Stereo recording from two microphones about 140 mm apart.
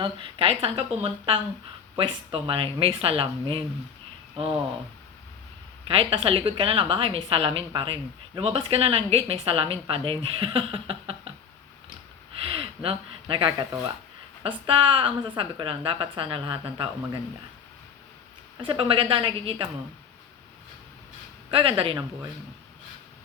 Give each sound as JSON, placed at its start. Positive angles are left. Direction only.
{"t": 0.0, "sound": "a woman's voice", "side_deg": -40}
{"t": 5.9, "sound": "a woman's voice", "side_deg": -40}
{"t": 12.5, "sound": "a woman's voice", "side_deg": -40}
{"t": 18.6, "sound": "a woman's voice", "side_deg": -40}
{"t": 21.5, "sound": "a woman's voice", "side_deg": -40}